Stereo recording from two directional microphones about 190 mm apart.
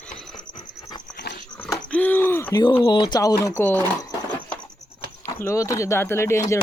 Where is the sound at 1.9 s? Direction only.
10° left (ahead or behind).